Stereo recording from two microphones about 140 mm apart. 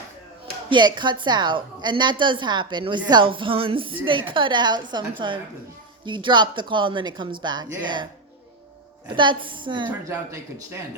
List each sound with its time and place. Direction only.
0.7 s a woman's voice: 35° right (ahead or behind)
9.0 s a woman's voice: 35° right (ahead or behind)